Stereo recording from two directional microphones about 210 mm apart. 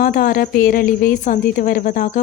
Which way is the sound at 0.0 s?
40° left (ahead or behind).